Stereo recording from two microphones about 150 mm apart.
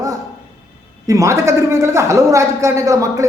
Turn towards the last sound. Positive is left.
turn(degrees=-20)  # may be behind; listen again after turning